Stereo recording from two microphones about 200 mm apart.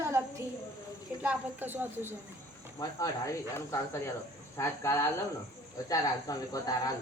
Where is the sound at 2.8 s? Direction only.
15° left (ahead or behind).